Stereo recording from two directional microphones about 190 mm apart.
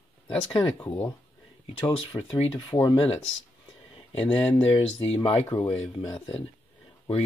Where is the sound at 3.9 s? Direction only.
30° left (ahead or behind).